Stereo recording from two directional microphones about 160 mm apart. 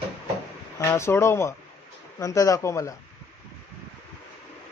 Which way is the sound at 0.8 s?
15° left (ahead or behind).